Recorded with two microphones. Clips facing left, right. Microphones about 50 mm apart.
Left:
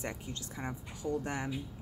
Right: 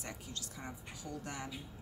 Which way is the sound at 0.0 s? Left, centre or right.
Left.